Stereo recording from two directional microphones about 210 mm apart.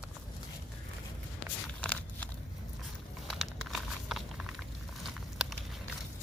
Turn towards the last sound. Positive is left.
turn(degrees=0)  # may be behind; listen again after turning